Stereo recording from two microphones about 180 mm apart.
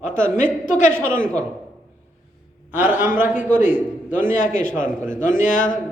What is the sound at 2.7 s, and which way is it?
Speech, 10° right (ahead or behind).